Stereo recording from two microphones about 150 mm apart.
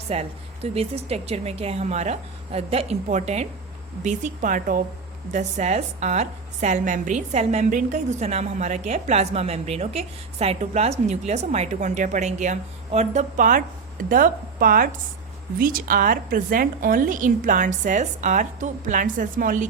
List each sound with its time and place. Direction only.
0.1 s a woman's voice: 45° right (ahead or behind); by 19.6 s 65° right (ahead or behind)